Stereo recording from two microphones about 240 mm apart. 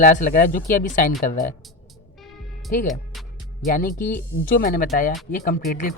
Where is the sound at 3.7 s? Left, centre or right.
Left.